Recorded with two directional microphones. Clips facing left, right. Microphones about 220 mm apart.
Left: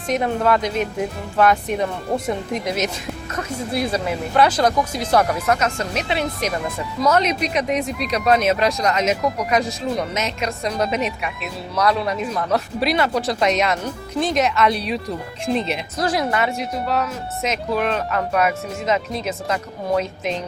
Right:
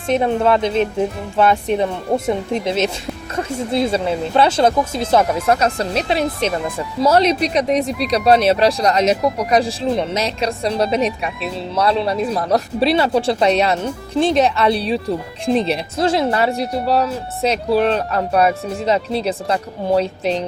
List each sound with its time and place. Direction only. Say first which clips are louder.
0.1 s speech: right 3 dB; 25° right (ahead or behind)